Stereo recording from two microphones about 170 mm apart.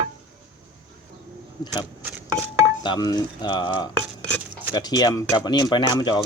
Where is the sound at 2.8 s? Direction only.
25° left (ahead or behind).